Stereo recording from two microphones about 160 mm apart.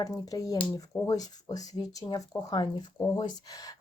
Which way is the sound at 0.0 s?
20° left (ahead or behind).